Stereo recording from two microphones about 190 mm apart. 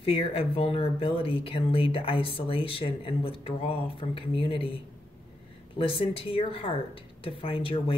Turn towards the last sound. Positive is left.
turn(degrees=30)  # may be behind; listen again after turning